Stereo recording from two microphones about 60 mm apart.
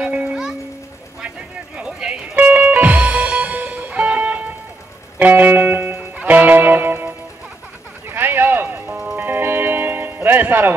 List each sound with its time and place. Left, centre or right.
0.0 s music: centre
1.8 s music: centre; by 7.1 s right
8.1 s a sound: right
9.0 s music: right